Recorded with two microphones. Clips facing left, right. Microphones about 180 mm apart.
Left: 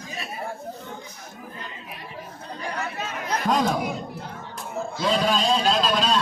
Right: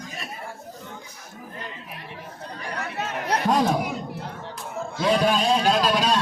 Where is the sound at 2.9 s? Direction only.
70° right (ahead or behind).